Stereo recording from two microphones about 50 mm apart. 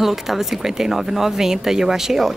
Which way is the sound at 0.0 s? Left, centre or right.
Centre.